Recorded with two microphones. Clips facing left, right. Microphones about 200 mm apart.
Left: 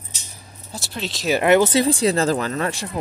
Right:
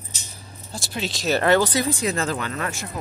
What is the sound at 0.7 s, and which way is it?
Speech, centre (ahead or behind).